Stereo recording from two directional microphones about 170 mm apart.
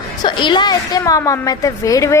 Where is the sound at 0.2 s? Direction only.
25° left (ahead or behind).